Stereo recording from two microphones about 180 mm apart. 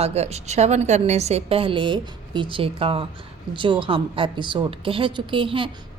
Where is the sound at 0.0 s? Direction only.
35° right (ahead or behind).